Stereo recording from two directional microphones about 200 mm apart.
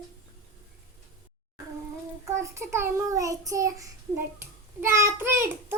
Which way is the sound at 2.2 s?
15° right (ahead or behind).